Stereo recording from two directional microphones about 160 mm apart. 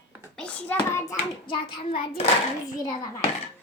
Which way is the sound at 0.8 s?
20° left (ahead or behind).